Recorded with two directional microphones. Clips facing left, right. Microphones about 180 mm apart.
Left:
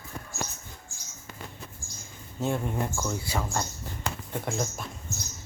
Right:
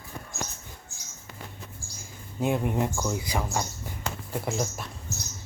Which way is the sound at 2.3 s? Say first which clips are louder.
Right 3 dB; 15° right (ahead or behind).